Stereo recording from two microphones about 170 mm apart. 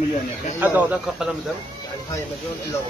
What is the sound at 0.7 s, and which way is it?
Speech, 10° right (ahead or behind).